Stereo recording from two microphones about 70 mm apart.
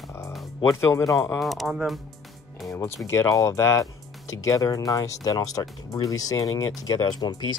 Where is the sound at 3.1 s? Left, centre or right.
Left.